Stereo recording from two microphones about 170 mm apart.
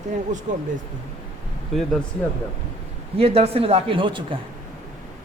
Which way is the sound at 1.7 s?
Centre (ahead or behind).